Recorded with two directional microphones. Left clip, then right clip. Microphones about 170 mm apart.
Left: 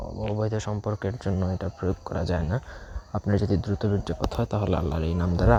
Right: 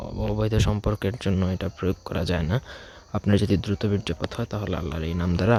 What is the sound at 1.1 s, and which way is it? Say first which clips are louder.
Speech: right 2 dB; 25° right (ahead or behind).